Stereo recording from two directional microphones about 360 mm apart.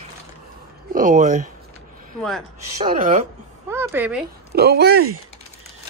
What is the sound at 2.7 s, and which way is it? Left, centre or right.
Speech, centre.